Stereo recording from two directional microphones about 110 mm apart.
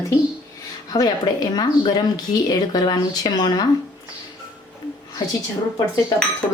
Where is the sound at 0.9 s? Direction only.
35° left (ahead or behind).